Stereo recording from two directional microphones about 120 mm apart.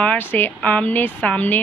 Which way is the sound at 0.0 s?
15° left (ahead or behind).